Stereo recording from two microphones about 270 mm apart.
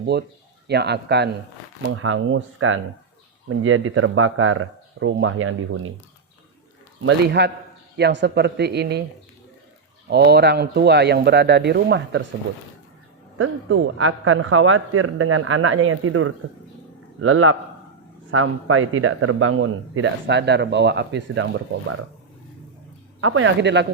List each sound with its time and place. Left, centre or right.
0.0 s a man's voice: right
7.0 s speech: right
10.1 s speech: right
13.4 s a man's voice: right
23.2 s a man's voice: right